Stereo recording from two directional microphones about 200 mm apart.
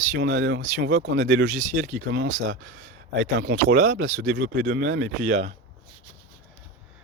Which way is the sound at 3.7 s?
45° right (ahead or behind).